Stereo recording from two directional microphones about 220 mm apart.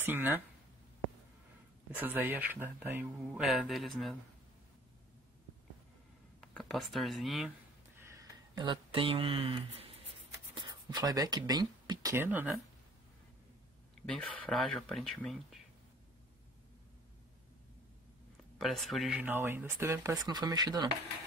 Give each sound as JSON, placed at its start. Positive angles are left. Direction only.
{"t": 0.0, "sound": "speech", "side_deg": -10}
{"t": 2.0, "sound": "speech", "side_deg": -10}
{"t": 6.4, "sound": "speech", "side_deg": 0}
{"t": 8.0, "sound": "speech", "side_deg": -15}
{"t": 14.0, "sound": "speech", "side_deg": 5}
{"t": 18.6, "sound": "speech", "side_deg": 0}